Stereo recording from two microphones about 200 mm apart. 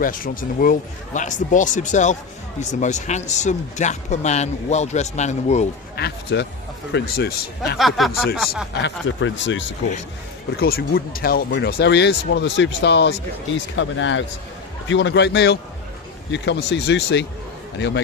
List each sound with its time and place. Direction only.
0.0 s speech: 45° left (ahead or behind)
6.0 s a man's voice: 55° left (ahead or behind)
7.8 s speech: centre (ahead or behind)
8.8 s speech: 65° left (ahead or behind)
10.6 s speech: 50° left (ahead or behind)